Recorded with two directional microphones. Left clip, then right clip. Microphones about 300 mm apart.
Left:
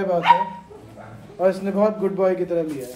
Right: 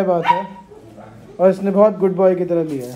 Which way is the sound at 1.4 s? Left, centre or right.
Right.